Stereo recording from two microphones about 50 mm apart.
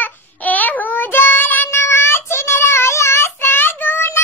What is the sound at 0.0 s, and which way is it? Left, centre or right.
Child singing, left.